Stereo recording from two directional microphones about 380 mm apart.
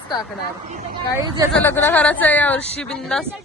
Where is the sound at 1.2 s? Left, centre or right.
Centre.